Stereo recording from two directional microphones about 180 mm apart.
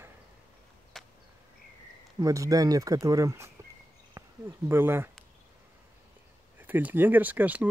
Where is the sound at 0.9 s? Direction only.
Centre (ahead or behind).